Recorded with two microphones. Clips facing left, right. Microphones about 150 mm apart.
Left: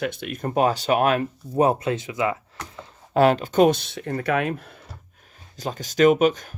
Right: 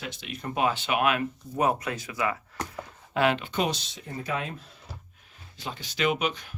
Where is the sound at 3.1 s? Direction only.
40° left (ahead or behind); by 4.8 s 65° left (ahead or behind).